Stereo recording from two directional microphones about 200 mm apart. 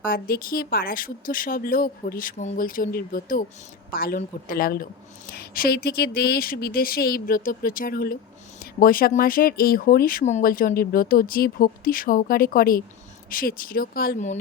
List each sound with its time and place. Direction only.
0.0 s speech: 45° left (ahead or behind)